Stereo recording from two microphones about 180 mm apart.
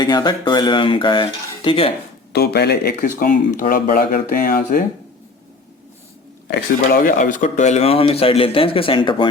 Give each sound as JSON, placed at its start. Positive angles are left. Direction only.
{"t": 0.0, "sound": "speech", "side_deg": 25}
{"t": 2.3, "sound": "speech", "side_deg": 65}
{"t": 6.5, "sound": "speech", "side_deg": 50}